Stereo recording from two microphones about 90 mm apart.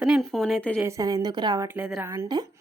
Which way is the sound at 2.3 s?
50° right (ahead or behind).